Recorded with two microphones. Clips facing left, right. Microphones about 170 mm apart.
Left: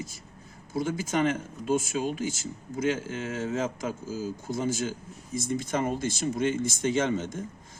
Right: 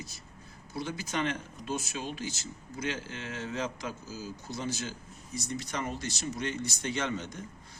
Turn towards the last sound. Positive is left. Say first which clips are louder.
# left 7 dB
turn(degrees=45)  # may be behind; listen again after turning